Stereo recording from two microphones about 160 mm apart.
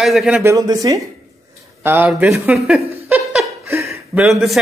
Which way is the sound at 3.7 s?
15° right (ahead or behind).